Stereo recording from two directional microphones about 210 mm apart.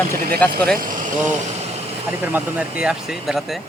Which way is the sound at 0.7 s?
40° right (ahead or behind).